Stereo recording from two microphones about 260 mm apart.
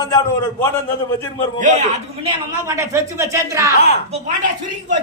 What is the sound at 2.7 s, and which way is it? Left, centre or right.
Speech, centre.